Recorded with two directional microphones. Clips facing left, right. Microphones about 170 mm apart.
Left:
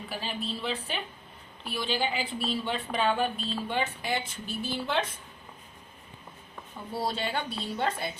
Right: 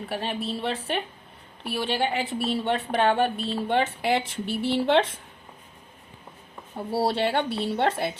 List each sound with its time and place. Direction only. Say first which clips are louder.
0.1 s speech: right 5 dB; 70° right (ahead or behind)
6.7 s speech: right 8 dB; 75° right (ahead or behind)